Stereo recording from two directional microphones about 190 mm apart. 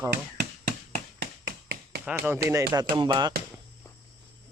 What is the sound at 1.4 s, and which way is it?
Tap, 55° right (ahead or behind).